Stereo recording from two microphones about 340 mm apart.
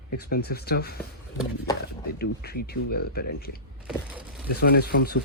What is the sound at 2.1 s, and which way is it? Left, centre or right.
Speech, left.